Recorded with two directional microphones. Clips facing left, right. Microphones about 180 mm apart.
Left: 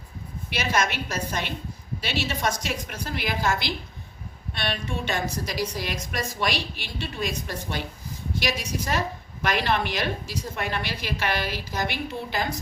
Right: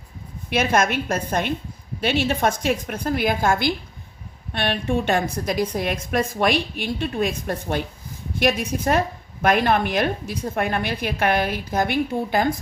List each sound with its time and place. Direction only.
0.5 s a woman's voice: 50° right (ahead or behind)